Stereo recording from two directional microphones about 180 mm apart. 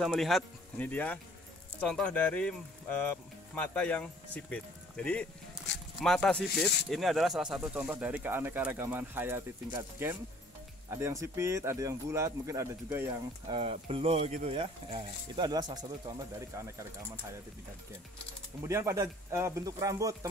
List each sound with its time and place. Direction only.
0.0 s speech: centre (ahead or behind); by 13.1 s 15° right (ahead or behind)
13.5 s speech: 30° right (ahead or behind)
18.7 s speech: 15° right (ahead or behind)